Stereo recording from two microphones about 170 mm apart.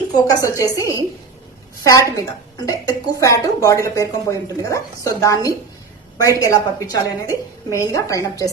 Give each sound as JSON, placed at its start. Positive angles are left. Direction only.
{"t": 0.3, "sound": "speech", "side_deg": 20}